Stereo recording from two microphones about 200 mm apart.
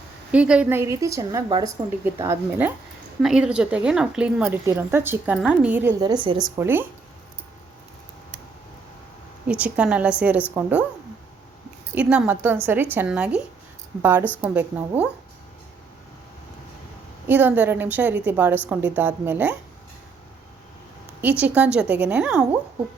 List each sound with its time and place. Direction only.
0.3 s a woman's voice: 5° right (ahead or behind)
6.0 s speech: 20° right (ahead or behind)
9.5 s a woman's voice: 5° right (ahead or behind)
11.9 s a woman's voice: 5° right (ahead or behind)
17.2 s a woman's voice: 10° right (ahead or behind)
21.2 s a woman's voice: 10° right (ahead or behind)